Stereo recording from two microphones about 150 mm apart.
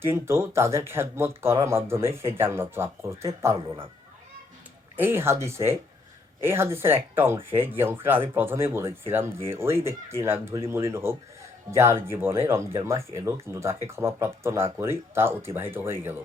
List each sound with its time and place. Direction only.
0.0 s speech: 20° right (ahead or behind)
4.9 s speech: 15° right (ahead or behind)